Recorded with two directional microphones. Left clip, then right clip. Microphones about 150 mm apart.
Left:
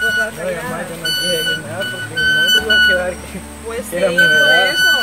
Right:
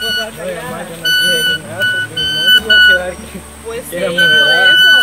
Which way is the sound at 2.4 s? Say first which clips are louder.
Right 6 dB; 20° right (ahead or behind).